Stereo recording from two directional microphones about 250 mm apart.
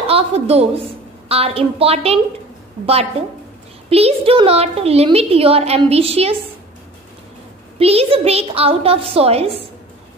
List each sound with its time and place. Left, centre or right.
0.0 s a woman's voice: right
3.9 s a woman's voice: right
7.8 s a woman's voice: right